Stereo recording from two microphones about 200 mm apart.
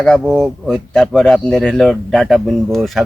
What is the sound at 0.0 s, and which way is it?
Speech, centre (ahead or behind).